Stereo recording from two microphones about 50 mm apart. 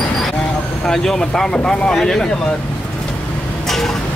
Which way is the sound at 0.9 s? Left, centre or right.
Centre.